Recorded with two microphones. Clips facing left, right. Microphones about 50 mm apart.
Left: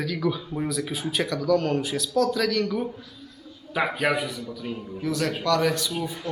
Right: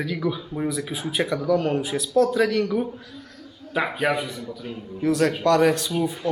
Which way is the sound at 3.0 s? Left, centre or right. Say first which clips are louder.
Right 4 dB; right.